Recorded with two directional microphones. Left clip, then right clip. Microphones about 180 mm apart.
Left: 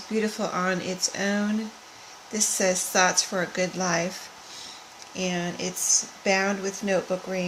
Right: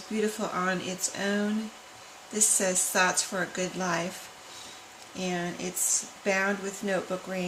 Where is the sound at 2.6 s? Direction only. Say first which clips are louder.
Left 5 dB; 40° left (ahead or behind).